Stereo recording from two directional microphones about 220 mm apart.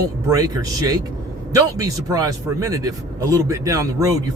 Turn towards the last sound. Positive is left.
turn(degrees=-15)  # may be behind; listen again after turning